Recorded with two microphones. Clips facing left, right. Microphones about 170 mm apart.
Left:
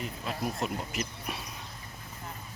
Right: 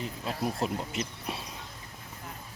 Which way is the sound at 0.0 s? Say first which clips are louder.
Right 2 dB; 30° right (ahead or behind).